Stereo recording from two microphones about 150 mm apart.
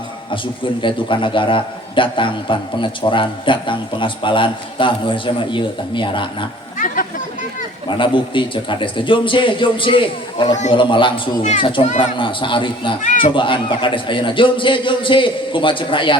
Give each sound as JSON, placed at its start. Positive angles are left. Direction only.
{"t": 0.3, "sound": "a man's voice", "side_deg": 35}
{"t": 6.7, "sound": "chatter", "side_deg": 65}
{"t": 7.9, "sound": "a man's voice", "side_deg": 35}